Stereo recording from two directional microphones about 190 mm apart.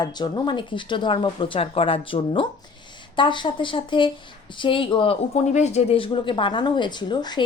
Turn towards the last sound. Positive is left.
turn(degrees=25)  # may be behind; listen again after turning